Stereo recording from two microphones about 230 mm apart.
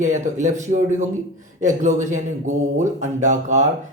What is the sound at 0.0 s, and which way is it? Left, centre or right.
Speech, right.